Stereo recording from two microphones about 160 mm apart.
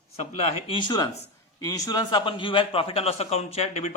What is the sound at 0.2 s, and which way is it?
A man's voice, 35° left (ahead or behind).